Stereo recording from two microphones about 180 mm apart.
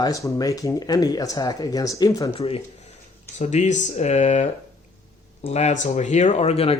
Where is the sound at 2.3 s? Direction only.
35° left (ahead or behind).